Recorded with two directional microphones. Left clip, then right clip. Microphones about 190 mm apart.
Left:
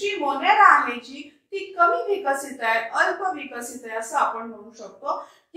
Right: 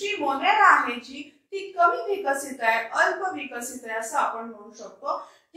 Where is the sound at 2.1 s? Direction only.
15° right (ahead or behind).